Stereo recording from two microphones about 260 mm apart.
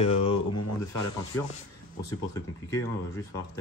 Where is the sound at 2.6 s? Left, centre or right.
Centre.